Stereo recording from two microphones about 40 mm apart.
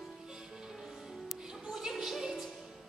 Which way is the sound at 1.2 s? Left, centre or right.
Centre.